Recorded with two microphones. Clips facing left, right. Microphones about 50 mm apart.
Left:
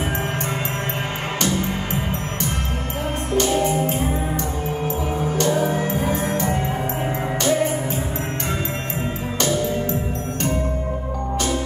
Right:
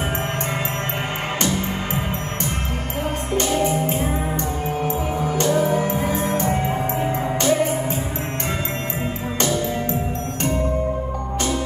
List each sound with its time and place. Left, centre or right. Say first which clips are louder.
3.9 s music: even; right